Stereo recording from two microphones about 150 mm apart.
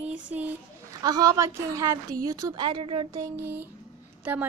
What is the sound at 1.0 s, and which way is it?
A woman's voice, 25° right (ahead or behind).